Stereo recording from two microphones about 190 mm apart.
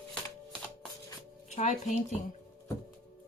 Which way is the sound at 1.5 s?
35° left (ahead or behind).